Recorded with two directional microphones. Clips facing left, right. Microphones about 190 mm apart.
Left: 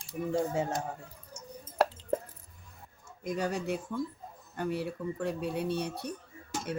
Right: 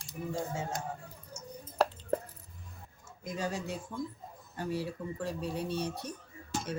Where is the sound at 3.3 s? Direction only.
60° left (ahead or behind).